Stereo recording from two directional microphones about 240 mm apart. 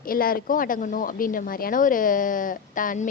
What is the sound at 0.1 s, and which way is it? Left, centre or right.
A woman's voice, left.